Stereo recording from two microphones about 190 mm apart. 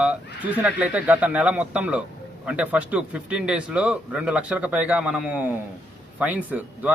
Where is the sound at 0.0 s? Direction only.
5° right (ahead or behind).